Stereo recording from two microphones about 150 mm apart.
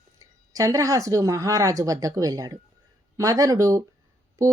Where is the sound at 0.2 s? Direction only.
20° right (ahead or behind).